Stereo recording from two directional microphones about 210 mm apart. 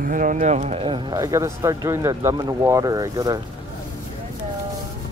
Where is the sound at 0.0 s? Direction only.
40° right (ahead or behind); by 3.3 s 15° right (ahead or behind).